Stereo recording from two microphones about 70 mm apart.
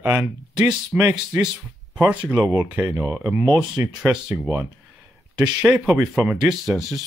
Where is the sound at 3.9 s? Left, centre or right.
Centre.